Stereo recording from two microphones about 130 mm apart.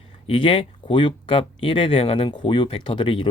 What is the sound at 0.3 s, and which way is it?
Speech, 45° left (ahead or behind).